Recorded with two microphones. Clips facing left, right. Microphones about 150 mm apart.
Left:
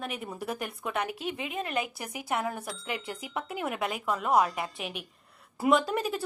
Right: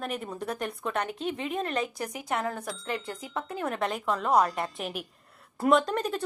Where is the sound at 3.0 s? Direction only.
10° left (ahead or behind).